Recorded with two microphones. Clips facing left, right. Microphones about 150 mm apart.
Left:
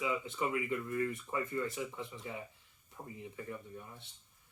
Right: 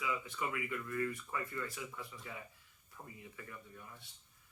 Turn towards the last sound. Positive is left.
turn(degrees=25)  # may be behind; listen again after turning